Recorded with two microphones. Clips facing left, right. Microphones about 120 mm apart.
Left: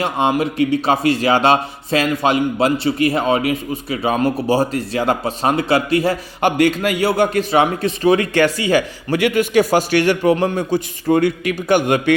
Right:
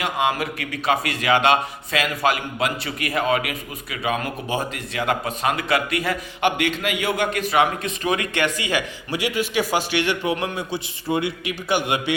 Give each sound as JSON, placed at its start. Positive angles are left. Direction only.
{"t": 0.0, "sound": "a man's voice", "side_deg": 30}
{"t": 9.1, "sound": "a man's voice", "side_deg": 55}